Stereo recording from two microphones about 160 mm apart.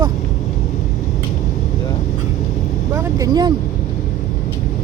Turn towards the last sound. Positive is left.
turn(degrees=-25)  # may be behind; listen again after turning